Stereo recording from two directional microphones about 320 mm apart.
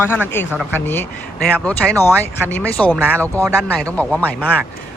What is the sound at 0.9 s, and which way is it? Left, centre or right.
Speech, centre.